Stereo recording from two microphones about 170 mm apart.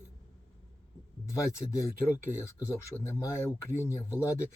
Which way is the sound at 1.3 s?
15° left (ahead or behind).